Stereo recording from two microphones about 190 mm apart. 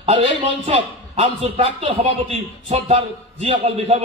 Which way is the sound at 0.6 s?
35° right (ahead or behind).